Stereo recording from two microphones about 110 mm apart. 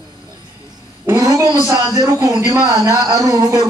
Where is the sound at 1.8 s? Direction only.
45° right (ahead or behind).